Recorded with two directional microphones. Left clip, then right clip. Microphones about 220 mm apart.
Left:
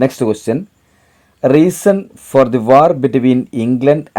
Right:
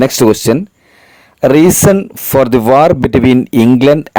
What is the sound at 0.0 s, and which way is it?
Speech, 30° right (ahead or behind).